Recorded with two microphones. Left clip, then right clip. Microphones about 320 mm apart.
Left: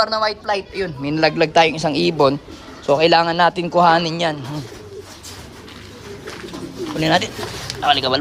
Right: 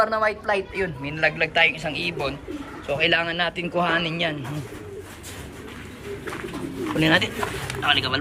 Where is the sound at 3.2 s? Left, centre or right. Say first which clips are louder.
Left 8 dB; left.